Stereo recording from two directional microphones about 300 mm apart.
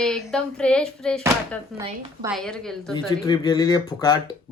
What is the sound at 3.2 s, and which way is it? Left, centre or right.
Speech, centre.